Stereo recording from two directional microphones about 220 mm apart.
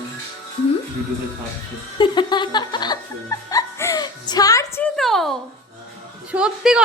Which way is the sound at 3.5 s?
15° left (ahead or behind).